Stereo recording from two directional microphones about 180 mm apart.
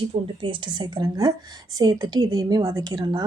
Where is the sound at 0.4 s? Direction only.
30° right (ahead or behind).